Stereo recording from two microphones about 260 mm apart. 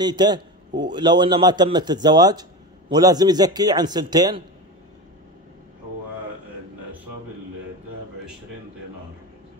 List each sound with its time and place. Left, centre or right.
0.0 s a man's voice: centre